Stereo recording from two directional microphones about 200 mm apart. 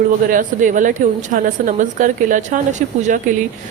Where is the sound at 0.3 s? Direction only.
40° right (ahead or behind).